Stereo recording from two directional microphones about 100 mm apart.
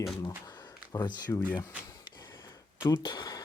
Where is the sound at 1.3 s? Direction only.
30° left (ahead or behind).